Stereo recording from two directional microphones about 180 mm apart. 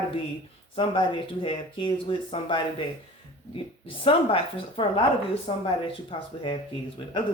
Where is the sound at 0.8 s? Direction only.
25° left (ahead or behind).